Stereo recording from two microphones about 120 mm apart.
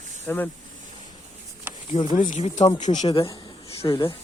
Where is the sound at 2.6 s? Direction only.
60° left (ahead or behind).